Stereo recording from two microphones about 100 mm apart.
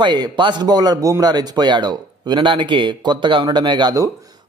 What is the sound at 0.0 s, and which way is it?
A man's voice, 50° right (ahead or behind).